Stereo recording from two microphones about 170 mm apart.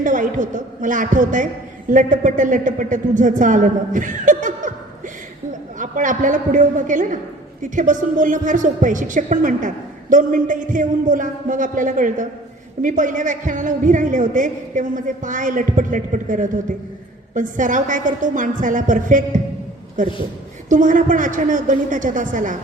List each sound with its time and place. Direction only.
0.0 s a woman's voice: 50° right (ahead or behind)
5.8 s a woman's voice: 50° right (ahead or behind)